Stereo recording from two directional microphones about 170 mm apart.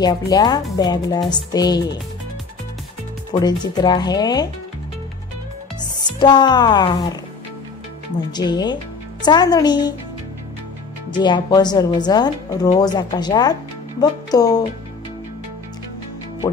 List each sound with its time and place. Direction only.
0.0 s speech: 25° left (ahead or behind)
3.3 s speech: 25° left (ahead or behind)
5.8 s speech: 25° left (ahead or behind)
8.3 s speech: 25° left (ahead or behind)
11.1 s speech: 25° left (ahead or behind)